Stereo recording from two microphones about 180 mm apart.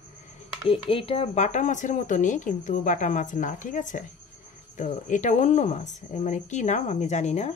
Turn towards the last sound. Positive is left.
turn(degrees=40)  # may be behind; listen again after turning